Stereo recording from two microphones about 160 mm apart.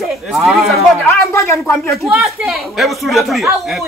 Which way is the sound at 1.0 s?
15° left (ahead or behind).